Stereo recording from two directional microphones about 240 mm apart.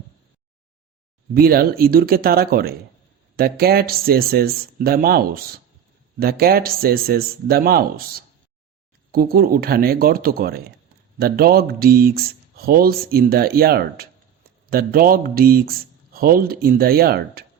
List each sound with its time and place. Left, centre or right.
1.3 s speech: right
9.1 s speech: right